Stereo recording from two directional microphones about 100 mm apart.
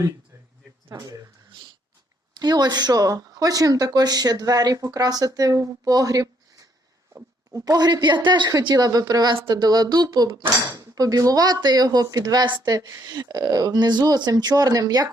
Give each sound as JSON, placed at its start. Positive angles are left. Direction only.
{"t": 0.9, "sound": "speech", "side_deg": -35}
{"t": 2.3, "sound": "speech", "side_deg": -45}
{"t": 7.5, "sound": "speech", "side_deg": -35}